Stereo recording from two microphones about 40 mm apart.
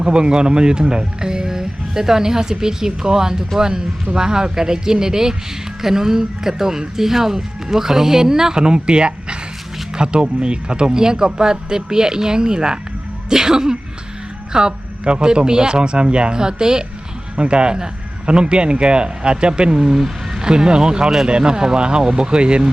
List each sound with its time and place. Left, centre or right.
0.0 s a man's voice: right